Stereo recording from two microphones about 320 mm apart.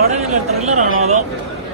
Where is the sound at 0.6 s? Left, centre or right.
Right.